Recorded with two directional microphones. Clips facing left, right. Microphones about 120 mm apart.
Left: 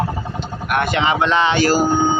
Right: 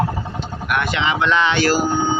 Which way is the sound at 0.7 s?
45° left (ahead or behind).